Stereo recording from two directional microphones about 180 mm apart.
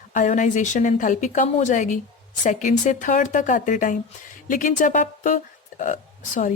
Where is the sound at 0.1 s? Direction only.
45° left (ahead or behind).